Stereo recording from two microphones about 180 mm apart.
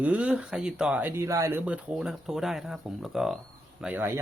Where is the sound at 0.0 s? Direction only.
5° right (ahead or behind).